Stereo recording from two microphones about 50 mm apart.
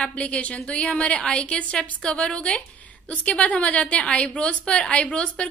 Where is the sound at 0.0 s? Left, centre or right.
Left.